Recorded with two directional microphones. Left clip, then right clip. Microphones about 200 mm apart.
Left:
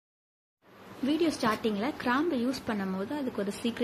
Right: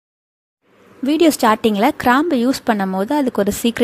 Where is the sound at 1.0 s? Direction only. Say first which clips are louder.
Right 15 dB; 55° right (ahead or behind).